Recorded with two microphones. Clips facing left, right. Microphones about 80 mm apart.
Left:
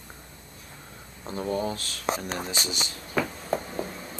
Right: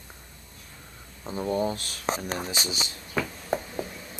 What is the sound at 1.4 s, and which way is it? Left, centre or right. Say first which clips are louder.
Speech: right 2 dB; right.